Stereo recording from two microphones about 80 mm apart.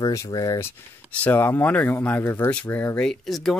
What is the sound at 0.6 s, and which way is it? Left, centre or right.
Speech, left.